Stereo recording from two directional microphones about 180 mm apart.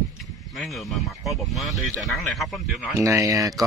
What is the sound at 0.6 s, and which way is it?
Speech, centre (ahead or behind).